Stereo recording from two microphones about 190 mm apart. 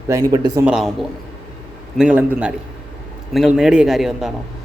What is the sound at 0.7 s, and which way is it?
Speech, 5° right (ahead or behind).